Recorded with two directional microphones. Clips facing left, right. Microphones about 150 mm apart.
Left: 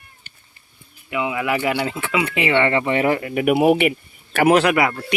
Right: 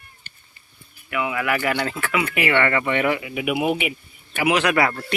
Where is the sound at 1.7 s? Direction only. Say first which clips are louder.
Left 2 dB; 10° left (ahead or behind).